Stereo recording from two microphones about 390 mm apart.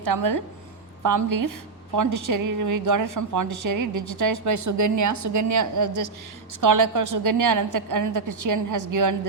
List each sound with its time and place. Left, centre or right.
0.0 s a woman's voice: right